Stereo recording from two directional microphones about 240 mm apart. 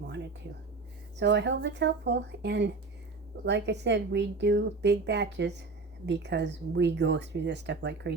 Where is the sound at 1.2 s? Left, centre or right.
Right.